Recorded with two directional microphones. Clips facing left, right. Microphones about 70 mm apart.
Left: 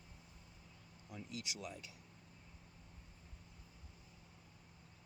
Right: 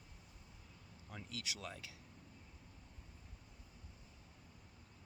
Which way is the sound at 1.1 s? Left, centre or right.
Right.